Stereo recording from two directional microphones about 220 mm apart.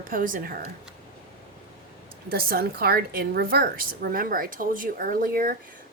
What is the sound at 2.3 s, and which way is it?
A woman's voice, 45° right (ahead or behind).